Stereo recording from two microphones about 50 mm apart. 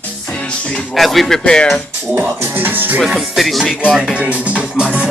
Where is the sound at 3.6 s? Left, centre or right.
Centre.